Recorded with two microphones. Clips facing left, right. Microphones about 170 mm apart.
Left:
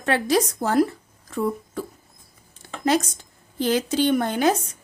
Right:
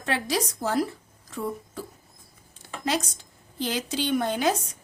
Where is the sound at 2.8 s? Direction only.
50° left (ahead or behind).